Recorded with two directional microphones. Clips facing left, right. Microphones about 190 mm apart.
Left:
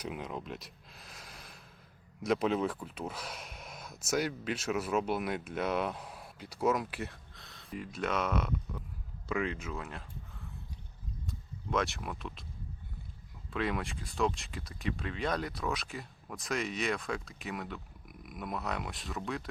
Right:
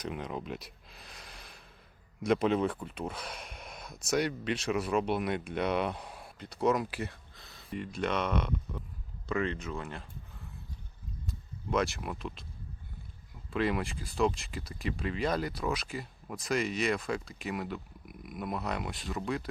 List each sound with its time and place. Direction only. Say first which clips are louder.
0.0 s speech: right 2 dB; 5° left (ahead or behind)
11.3 s speech: right 2 dB; centre (ahead or behind)
13.5 s speech: right 3 dB; centre (ahead or behind)